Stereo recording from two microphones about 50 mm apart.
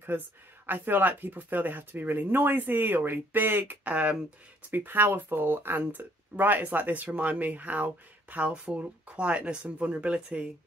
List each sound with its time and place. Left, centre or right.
0.7 s speech: right
3.8 s speech: right
4.6 s speech: right